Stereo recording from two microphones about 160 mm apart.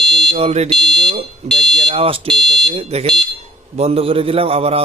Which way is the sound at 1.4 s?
45° right (ahead or behind).